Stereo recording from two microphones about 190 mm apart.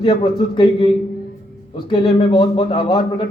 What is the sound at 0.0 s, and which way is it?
A man's voice, 25° left (ahead or behind).